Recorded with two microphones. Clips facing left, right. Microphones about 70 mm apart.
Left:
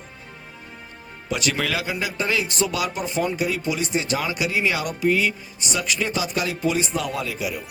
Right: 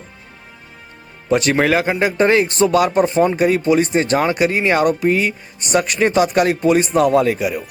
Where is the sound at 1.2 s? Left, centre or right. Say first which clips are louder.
Right 10 dB; right.